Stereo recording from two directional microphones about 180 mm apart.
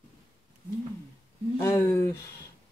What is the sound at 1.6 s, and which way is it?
Speech, 15° left (ahead or behind).